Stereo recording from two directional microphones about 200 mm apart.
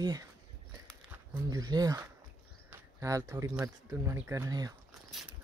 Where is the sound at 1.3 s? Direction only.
15° right (ahead or behind).